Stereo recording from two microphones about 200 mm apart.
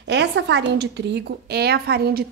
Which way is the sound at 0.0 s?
60° right (ahead or behind).